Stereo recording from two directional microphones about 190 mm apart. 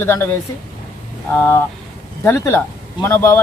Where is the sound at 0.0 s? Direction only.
10° left (ahead or behind).